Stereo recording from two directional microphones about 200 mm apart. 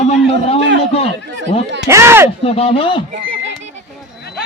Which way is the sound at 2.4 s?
30° left (ahead or behind).